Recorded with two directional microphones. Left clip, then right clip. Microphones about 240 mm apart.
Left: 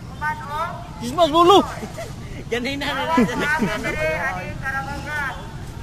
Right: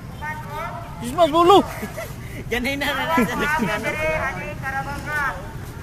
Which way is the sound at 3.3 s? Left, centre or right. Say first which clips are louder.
Even; left.